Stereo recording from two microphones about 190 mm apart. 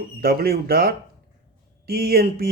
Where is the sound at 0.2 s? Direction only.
55° right (ahead or behind).